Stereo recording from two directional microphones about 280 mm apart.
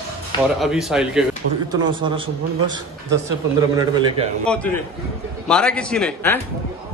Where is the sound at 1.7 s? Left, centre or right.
Centre.